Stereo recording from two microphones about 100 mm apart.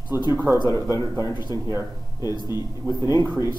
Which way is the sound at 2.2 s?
45° left (ahead or behind).